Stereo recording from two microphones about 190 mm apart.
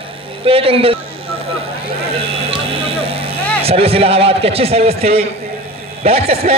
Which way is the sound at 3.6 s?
30° right (ahead or behind).